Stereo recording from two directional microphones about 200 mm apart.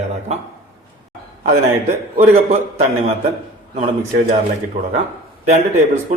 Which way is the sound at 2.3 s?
30° right (ahead or behind).